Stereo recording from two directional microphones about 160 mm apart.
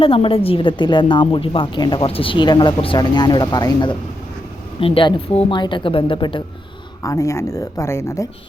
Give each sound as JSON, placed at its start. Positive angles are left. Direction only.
{"t": 0.0, "sound": "a woman's voice", "side_deg": 35}
{"t": 7.0, "sound": "speech", "side_deg": 20}